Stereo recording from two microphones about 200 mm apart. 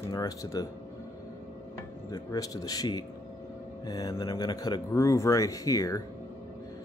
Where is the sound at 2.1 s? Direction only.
20° left (ahead or behind).